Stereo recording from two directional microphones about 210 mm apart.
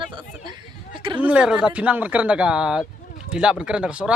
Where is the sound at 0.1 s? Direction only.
20° right (ahead or behind).